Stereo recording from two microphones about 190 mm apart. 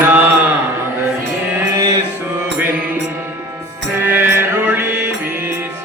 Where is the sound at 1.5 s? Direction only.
20° right (ahead or behind).